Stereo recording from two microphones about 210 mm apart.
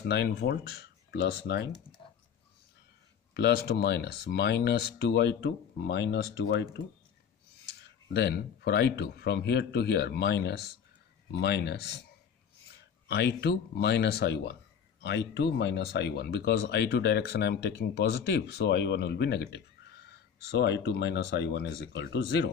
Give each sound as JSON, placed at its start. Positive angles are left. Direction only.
{"t": 0.0, "sound": "speech", "side_deg": 50}
{"t": 3.3, "sound": "speech", "side_deg": 50}
{"t": 8.1, "sound": "speech", "side_deg": 50}
{"t": 13.1, "sound": "speech", "side_deg": 50}